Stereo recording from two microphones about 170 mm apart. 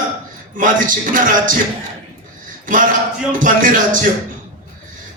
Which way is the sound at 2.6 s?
50° right (ahead or behind).